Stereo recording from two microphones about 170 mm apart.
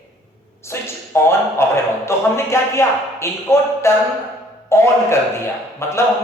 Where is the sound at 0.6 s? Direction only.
15° left (ahead or behind).